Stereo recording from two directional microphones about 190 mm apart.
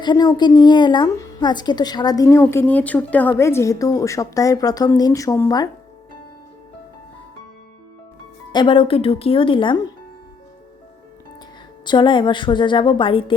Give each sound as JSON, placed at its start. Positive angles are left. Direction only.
{"t": 0.0, "sound": "a woman's voice", "side_deg": 20}
{"t": 8.5, "sound": "a woman's voice", "side_deg": 25}
{"t": 11.9, "sound": "a woman's voice", "side_deg": 25}